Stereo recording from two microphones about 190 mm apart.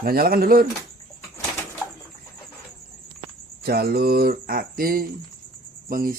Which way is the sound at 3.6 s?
55° right (ahead or behind).